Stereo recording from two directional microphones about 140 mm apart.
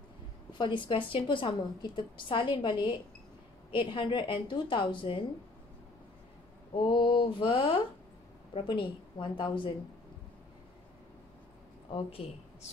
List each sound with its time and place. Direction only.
0.5 s a woman's voice: 35° left (ahead or behind)
6.7 s a woman's voice: 35° left (ahead or behind)